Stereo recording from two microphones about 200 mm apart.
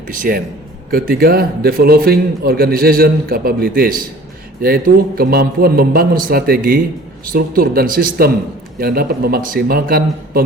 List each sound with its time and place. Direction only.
0.1 s a man's voice: 45° right (ahead or behind)